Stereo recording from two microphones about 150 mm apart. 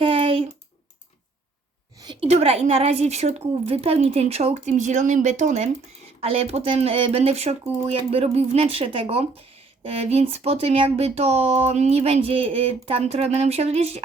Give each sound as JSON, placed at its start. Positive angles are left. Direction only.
{"t": 0.0, "sound": "a sound", "side_deg": -35}
{"t": 2.2, "sound": "speech", "side_deg": -45}
{"t": 6.2, "sound": "speech", "side_deg": -40}